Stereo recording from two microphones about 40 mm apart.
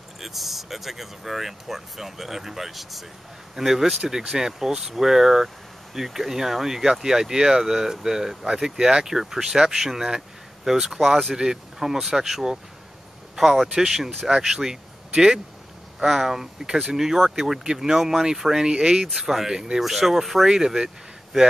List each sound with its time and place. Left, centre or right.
0.2 s speech: centre
18.7 s speech: right
19.1 s speech: centre